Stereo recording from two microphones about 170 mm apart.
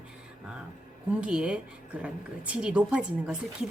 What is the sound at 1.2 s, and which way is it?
Speech, 5° right (ahead or behind).